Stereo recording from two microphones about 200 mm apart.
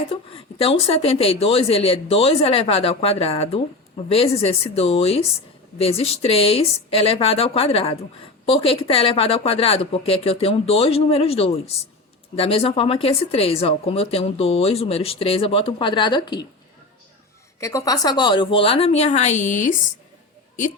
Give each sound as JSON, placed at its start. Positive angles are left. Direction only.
{"t": 0.1, "sound": "speech", "side_deg": 25}
{"t": 17.6, "sound": "speech", "side_deg": 15}